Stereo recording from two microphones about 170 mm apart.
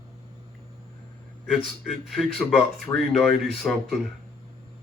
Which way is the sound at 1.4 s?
Centre (ahead or behind).